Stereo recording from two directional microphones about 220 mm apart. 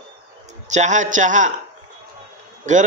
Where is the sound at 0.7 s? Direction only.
35° right (ahead or behind).